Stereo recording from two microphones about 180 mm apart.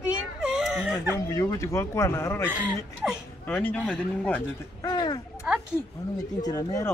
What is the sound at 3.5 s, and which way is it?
Speech, 10° left (ahead or behind).